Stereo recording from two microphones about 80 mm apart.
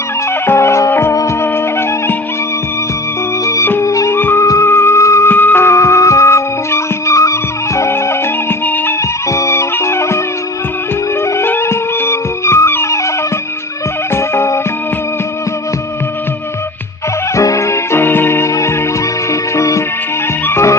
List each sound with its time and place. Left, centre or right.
0.4 s music: left
1.1 s music: left
3.4 s music: left
4.2 s music: left
5.3 s music: left
8.6 s music: left
9.3 s music: left
11.3 s music: left
14.1 s music: left
17.3 s music: left